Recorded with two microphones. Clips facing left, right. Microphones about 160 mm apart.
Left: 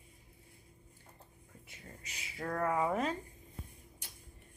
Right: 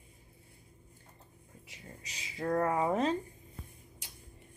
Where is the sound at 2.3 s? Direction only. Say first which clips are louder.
Right 4 dB; 25° right (ahead or behind).